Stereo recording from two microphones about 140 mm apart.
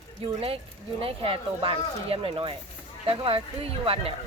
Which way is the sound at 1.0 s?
40° right (ahead or behind).